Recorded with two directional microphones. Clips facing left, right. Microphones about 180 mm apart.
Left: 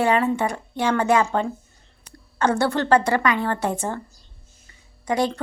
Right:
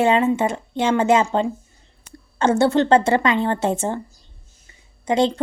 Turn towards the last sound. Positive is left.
turn(degrees=-25)  # may be behind; listen again after turning